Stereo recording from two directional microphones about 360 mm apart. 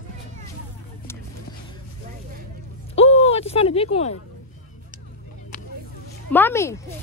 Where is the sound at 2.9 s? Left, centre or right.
Centre.